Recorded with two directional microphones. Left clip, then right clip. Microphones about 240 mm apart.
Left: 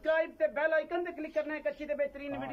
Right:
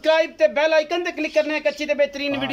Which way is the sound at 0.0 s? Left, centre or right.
Centre.